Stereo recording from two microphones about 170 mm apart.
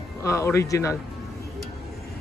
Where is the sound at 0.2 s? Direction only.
15° left (ahead or behind).